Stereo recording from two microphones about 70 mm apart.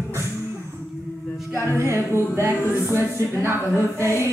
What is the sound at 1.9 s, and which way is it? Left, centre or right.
Music, right.